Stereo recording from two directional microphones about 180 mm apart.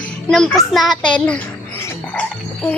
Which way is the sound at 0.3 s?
5° left (ahead or behind).